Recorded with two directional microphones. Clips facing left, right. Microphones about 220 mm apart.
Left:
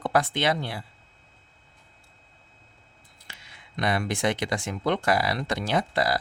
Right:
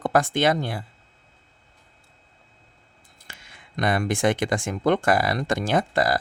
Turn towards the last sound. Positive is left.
turn(degrees=-50)  # may be behind; listen again after turning